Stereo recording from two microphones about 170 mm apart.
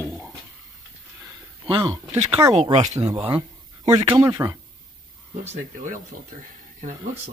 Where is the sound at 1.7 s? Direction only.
25° right (ahead or behind).